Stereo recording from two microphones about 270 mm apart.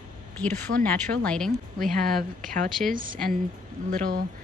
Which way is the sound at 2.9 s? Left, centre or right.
Right.